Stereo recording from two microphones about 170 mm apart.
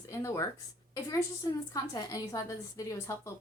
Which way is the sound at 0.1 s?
15° left (ahead or behind).